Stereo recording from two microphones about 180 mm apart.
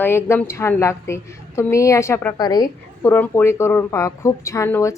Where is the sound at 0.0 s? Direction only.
15° left (ahead or behind).